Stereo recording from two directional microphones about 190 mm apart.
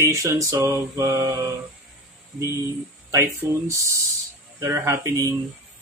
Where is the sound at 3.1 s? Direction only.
15° right (ahead or behind).